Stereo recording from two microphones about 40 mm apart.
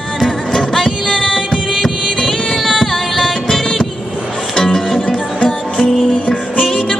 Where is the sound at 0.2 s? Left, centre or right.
Centre.